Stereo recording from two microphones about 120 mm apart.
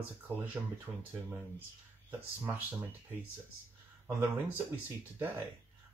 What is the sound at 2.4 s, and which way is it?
Speech, 15° right (ahead or behind).